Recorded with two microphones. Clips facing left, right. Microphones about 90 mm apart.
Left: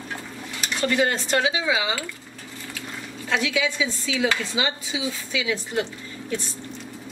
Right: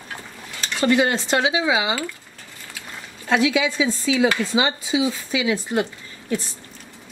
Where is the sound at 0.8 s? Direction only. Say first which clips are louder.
Right 4 dB; 15° right (ahead or behind).